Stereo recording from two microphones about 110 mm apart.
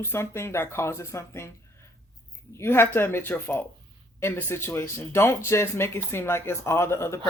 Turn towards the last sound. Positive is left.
turn(degrees=25)  # may be behind; listen again after turning